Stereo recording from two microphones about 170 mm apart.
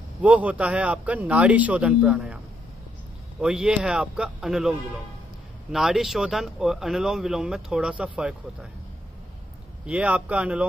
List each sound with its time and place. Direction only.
0.2 s a man's voice: 10° right (ahead or behind)
9.8 s a man's voice: 5° right (ahead or behind)